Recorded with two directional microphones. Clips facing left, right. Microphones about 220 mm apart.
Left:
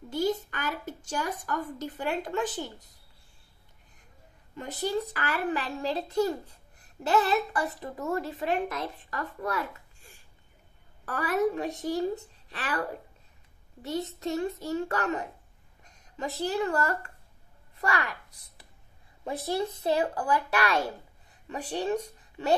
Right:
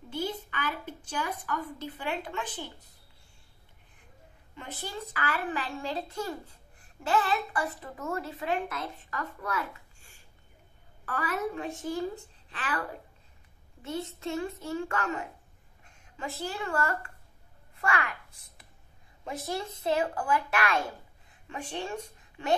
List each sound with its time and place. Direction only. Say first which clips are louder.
0.1 s a woman's voice: left 6 dB; 40° left (ahead or behind)
4.6 s a child's voice: left 9 dB; 40° left (ahead or behind)
13.8 s a child's voice: left 3 dB; 40° left (ahead or behind)
19.2 s a child's voice: left 5 dB; 35° left (ahead or behind)